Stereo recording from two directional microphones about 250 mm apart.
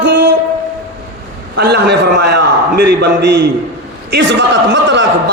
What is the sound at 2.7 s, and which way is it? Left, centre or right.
A man's voice, right.